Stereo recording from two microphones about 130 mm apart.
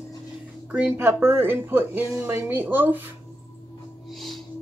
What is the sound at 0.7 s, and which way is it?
Speech, 15° right (ahead or behind).